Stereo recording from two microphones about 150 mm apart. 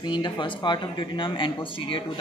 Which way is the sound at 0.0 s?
30° left (ahead or behind).